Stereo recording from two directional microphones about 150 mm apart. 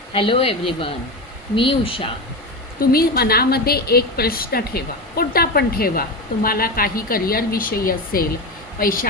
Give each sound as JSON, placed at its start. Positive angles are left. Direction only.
{"t": 0.1, "sound": "speech", "side_deg": 35}
{"t": 2.9, "sound": "a woman's voice", "side_deg": 90}